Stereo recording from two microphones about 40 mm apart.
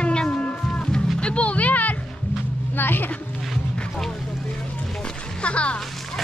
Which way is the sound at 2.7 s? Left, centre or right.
Left.